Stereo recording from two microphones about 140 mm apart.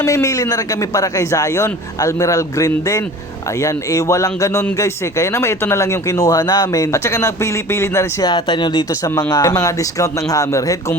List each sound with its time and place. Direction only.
0.0 s a man's voice: 20° left (ahead or behind)
8.3 s a man's voice: 35° left (ahead or behind)